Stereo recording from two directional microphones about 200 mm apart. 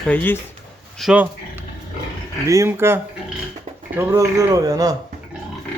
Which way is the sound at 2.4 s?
15° right (ahead or behind).